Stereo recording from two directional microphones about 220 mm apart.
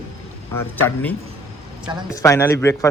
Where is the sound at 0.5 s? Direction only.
10° left (ahead or behind).